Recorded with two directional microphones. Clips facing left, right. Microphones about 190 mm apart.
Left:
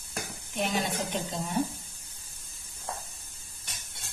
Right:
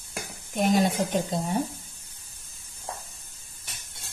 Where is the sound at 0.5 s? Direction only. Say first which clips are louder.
Right 7 dB; 40° right (ahead or behind).